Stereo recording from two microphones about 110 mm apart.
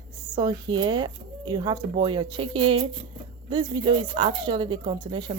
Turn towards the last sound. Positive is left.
turn(degrees=-50)  # may be behind; listen again after turning